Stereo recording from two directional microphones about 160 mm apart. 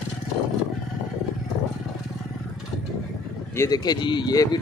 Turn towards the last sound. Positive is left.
turn(degrees=25)  # may be behind; listen again after turning